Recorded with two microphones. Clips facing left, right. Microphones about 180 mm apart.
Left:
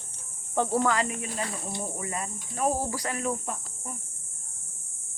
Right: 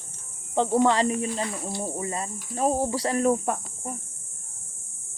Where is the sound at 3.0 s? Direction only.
40° right (ahead or behind).